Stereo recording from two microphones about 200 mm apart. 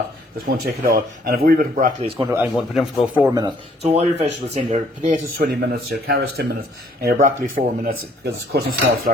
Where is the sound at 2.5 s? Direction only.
Centre (ahead or behind).